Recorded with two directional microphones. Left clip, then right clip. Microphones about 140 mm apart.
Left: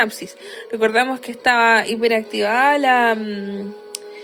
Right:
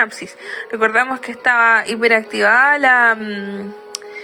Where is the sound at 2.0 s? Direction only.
50° left (ahead or behind).